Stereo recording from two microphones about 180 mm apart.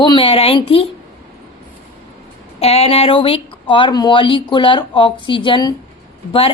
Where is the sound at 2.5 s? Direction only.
35° left (ahead or behind).